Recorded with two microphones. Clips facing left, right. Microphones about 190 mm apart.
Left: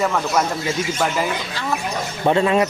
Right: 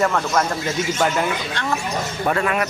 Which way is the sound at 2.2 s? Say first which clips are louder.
Left 5 dB; 25° left (ahead or behind).